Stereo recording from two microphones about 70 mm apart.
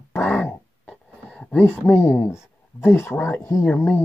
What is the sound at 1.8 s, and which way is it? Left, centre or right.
Speech, left.